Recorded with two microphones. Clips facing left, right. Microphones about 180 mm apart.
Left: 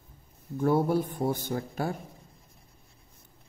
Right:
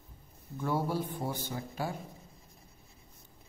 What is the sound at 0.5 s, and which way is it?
Speech, 55° left (ahead or behind).